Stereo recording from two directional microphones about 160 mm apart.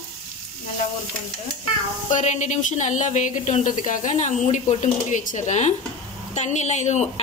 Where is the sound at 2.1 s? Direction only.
50° left (ahead or behind).